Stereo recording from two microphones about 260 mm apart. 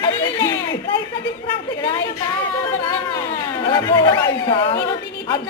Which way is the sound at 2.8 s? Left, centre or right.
Centre.